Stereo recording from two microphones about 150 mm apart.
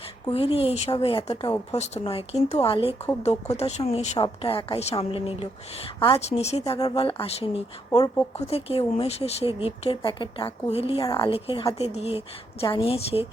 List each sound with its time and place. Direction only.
0.3 s a woman's voice: 40° left (ahead or behind)
1.7 s a woman's voice: 45° left (ahead or behind)
7.9 s speech: 25° left (ahead or behind)
8.4 s a woman's voice: 45° left (ahead or behind)
11.0 s a woman's voice: 25° left (ahead or behind)
11.3 s a woman's voice: 40° left (ahead or behind)